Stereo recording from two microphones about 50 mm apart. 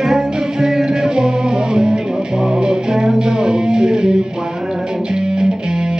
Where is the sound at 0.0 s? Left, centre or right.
Centre.